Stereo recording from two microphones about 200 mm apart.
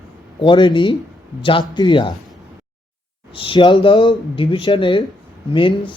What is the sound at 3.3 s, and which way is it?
Speech, 25° left (ahead or behind).